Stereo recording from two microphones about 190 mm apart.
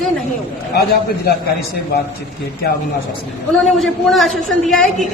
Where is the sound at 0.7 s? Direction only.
55° left (ahead or behind).